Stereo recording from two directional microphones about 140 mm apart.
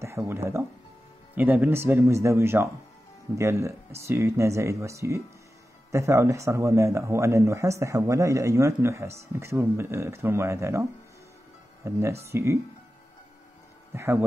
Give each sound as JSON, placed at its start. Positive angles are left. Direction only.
{"t": 0.0, "sound": "a man's voice", "side_deg": -20}
{"t": 13.9, "sound": "speech", "side_deg": -20}